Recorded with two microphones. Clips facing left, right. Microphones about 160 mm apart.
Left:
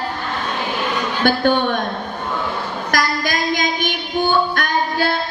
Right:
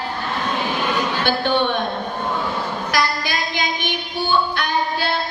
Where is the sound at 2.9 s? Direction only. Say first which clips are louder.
Left 3 dB; 45° left (ahead or behind).